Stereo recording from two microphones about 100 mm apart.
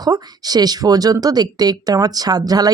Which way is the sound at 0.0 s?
40° right (ahead or behind).